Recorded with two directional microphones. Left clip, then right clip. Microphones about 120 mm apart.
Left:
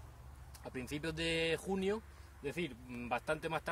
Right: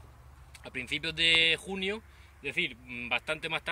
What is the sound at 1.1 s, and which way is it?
Speech, 30° left (ahead or behind).